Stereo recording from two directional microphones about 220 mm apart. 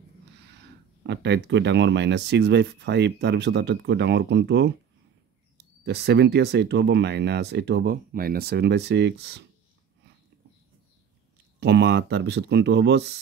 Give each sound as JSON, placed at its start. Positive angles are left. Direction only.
{"t": 1.0, "sound": "speech", "side_deg": -50}
{"t": 5.9, "sound": "speech", "side_deg": -50}
{"t": 11.6, "sound": "speech", "side_deg": -50}